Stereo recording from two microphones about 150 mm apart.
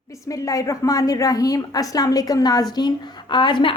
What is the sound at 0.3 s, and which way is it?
A woman's voice, 20° left (ahead or behind).